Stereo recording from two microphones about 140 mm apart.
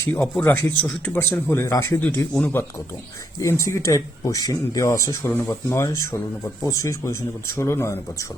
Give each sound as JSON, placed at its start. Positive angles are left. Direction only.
{"t": 0.0, "sound": "speech", "side_deg": 15}